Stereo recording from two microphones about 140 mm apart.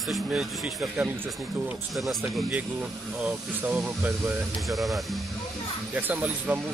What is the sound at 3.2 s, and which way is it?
Speech, 10° right (ahead or behind).